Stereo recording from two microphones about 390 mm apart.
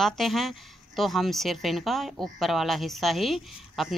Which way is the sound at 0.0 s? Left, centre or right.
Centre.